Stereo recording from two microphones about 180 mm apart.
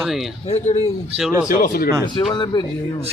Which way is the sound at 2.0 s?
25° left (ahead or behind).